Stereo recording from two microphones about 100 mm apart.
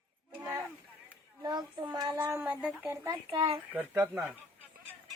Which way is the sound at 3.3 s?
60° right (ahead or behind).